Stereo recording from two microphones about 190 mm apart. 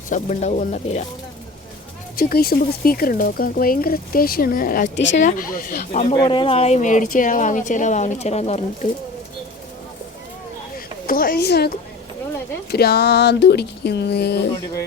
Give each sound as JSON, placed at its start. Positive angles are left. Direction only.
{"t": 0.1, "sound": "speech", "side_deg": 40}
{"t": 2.1, "sound": "speech", "side_deg": 55}
{"t": 6.1, "sound": "speech", "side_deg": 25}
{"t": 11.0, "sound": "a woman's voice", "side_deg": 50}
{"t": 12.7, "sound": "a sound", "side_deg": 55}